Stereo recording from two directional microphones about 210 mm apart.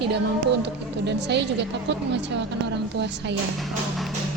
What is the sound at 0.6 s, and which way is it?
Speech, 55° right (ahead or behind).